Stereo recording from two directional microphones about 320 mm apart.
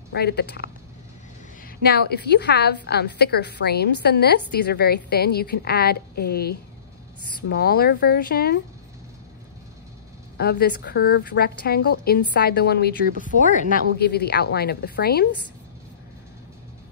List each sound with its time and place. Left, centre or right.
0.1 s a woman's voice: left
1.8 s a woman's voice: left
7.4 s a woman's voice: left
10.3 s a woman's voice: left